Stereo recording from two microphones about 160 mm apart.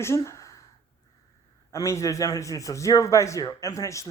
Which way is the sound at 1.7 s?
20° left (ahead or behind).